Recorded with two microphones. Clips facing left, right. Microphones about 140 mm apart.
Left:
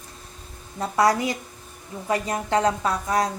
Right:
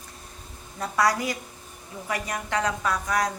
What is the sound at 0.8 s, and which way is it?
A woman's voice, 25° left (ahead or behind).